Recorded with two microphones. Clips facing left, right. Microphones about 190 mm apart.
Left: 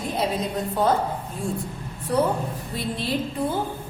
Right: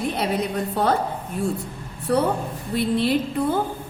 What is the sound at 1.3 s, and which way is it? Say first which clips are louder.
Speech: right 7 dB; 65° right (ahead or behind).